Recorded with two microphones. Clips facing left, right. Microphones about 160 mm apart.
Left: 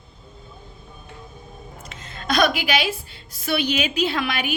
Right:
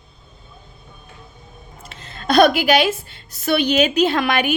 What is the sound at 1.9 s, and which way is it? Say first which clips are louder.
A woman's voice: right 6 dB; 40° right (ahead or behind).